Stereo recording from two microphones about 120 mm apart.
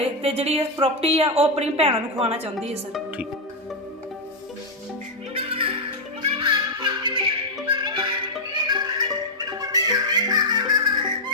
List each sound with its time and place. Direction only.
0.0 s a woman's voice: 55° right (ahead or behind)
5.3 s music: 50° right (ahead or behind)